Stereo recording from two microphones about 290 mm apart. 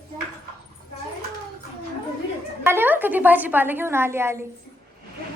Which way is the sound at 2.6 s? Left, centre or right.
Centre.